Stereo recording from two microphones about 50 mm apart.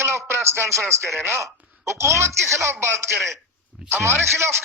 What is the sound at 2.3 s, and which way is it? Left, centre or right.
Speech, centre.